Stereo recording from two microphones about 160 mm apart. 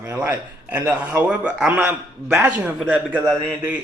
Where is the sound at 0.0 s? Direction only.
10° right (ahead or behind).